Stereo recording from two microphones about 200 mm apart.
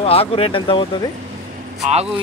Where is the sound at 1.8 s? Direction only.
35° right (ahead or behind).